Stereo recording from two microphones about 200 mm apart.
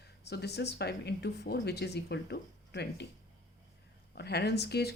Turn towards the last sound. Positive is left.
turn(degrees=55)  # may be behind; listen again after turning